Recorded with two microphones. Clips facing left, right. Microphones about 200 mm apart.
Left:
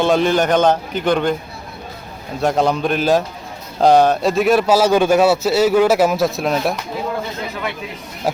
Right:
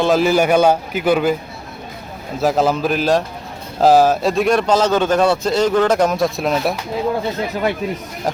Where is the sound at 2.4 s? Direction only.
Centre (ahead or behind).